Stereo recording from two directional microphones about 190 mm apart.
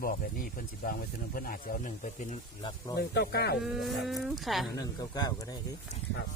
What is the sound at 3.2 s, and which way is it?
Speech, 60° left (ahead or behind).